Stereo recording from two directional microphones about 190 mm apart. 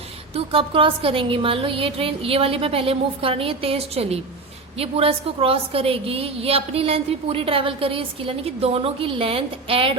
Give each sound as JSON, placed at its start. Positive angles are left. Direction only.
{"t": 0.3, "sound": "a woman's voice", "side_deg": -30}